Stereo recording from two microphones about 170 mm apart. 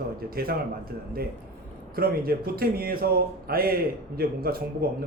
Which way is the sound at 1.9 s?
60° right (ahead or behind).